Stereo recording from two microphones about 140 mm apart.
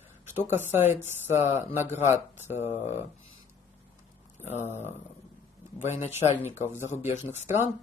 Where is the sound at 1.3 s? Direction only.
45° left (ahead or behind).